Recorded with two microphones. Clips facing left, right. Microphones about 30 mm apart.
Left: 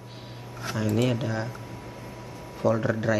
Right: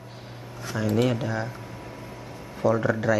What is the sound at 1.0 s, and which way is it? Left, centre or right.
Speech, centre.